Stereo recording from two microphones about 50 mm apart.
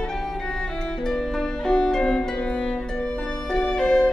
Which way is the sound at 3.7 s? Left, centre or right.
Centre.